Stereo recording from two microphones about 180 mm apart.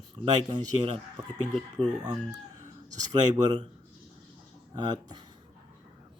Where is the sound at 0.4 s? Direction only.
25° right (ahead or behind).